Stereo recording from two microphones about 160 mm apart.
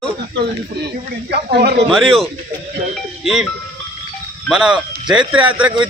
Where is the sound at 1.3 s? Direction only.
90° right.